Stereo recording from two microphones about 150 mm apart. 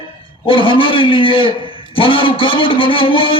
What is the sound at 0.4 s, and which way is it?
A man's voice, 35° left (ahead or behind).